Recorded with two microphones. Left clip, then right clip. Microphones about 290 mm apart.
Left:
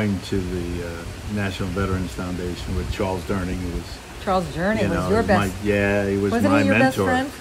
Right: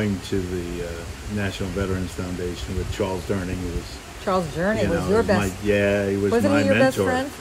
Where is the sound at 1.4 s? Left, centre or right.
Centre.